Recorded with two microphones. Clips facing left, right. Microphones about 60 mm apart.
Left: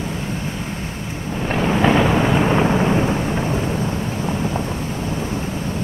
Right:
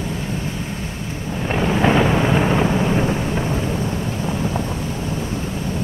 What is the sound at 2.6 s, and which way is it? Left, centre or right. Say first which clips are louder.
Thunder: left 1 dB; centre.